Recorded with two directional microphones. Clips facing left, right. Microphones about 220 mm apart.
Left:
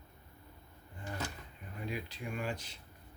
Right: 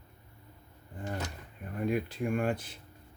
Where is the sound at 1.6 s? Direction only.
55° right (ahead or behind).